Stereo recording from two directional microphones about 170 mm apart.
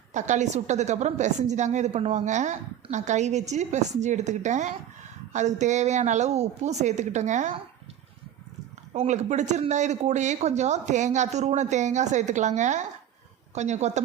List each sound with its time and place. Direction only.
0.1 s a woman's voice: 45° right (ahead or behind)
8.9 s a woman's voice: 40° right (ahead or behind)